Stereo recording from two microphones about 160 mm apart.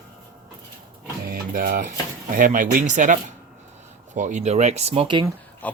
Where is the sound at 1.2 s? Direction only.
65° right (ahead or behind).